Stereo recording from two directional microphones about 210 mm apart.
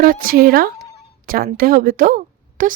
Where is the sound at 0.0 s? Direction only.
40° right (ahead or behind).